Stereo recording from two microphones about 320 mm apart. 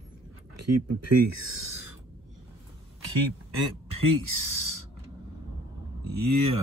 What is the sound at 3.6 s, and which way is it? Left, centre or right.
Speech, right.